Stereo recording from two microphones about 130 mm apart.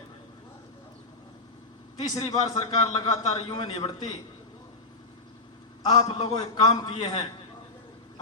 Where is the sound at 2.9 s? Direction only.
45° left (ahead or behind).